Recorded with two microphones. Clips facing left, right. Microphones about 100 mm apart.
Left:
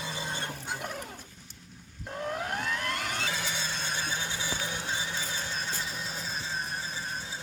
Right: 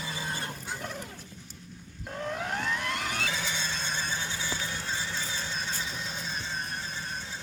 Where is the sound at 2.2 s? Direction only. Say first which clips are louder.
Right 1 dB; 5° left (ahead or behind).